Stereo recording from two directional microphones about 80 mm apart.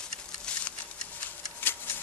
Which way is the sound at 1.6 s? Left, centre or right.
Left.